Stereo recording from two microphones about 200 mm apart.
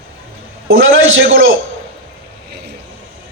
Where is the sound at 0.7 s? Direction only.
75° right (ahead or behind).